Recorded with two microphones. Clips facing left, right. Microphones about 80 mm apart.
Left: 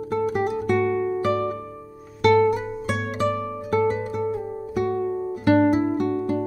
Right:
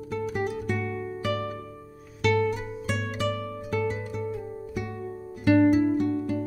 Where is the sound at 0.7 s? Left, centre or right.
Left.